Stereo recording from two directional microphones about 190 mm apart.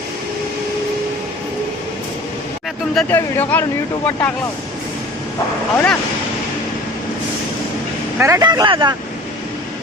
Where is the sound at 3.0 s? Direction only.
10° left (ahead or behind).